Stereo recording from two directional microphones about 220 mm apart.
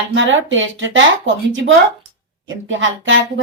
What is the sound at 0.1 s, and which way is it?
Speech, 55° right (ahead or behind).